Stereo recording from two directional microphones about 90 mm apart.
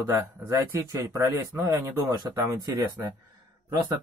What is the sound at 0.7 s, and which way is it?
Speech, 30° right (ahead or behind).